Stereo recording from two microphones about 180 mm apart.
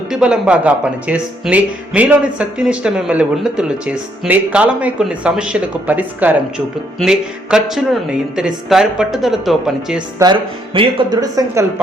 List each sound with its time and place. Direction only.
0.1 s speech: 5° right (ahead or behind)
10.2 s speech: 15° right (ahead or behind)